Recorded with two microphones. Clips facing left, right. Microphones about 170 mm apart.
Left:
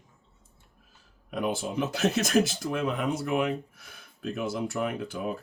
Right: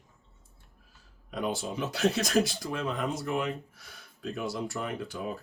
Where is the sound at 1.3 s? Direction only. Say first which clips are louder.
Left 3 dB; 60° left (ahead or behind).